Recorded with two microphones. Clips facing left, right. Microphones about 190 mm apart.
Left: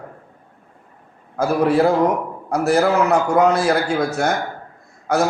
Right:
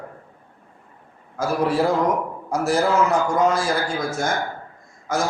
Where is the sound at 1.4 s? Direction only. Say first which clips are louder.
Left 5 dB; 55° left (ahead or behind).